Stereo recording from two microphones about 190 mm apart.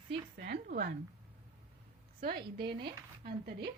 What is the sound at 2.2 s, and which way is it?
A woman's voice, 50° right (ahead or behind).